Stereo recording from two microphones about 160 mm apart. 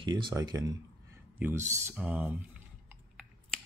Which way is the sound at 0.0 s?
30° right (ahead or behind).